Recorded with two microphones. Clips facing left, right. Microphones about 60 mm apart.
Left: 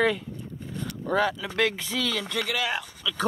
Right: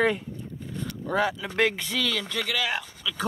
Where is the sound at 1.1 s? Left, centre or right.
Centre.